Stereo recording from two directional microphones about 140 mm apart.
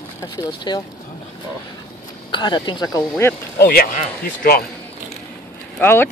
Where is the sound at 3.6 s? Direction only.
90° left.